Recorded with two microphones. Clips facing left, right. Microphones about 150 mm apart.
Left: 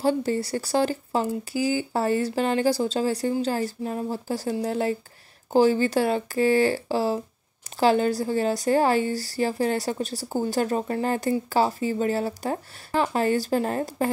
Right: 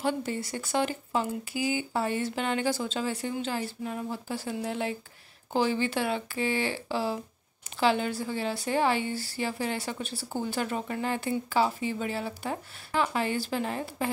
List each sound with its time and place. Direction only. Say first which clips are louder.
0.0 s a woman's voice: left 6 dB; 35° left (ahead or behind)